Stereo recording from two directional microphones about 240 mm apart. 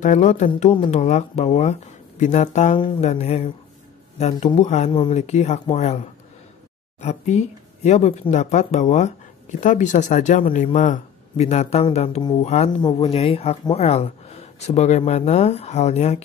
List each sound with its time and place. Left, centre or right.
0.0 s a woman's voice: left